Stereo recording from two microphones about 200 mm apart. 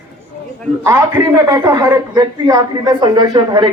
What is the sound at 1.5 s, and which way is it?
A man's voice, 15° right (ahead or behind).